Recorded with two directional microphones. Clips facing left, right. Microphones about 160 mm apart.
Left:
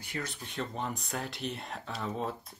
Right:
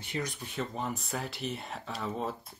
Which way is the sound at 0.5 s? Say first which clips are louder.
Right 1 dB; centre (ahead or behind).